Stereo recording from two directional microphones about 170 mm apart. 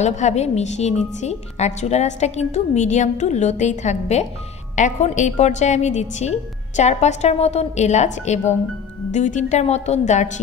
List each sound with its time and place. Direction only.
0.0 s a woman's voice: 45° left (ahead or behind)